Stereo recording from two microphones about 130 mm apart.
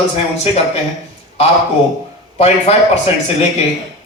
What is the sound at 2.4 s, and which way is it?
Speech, 55° left (ahead or behind).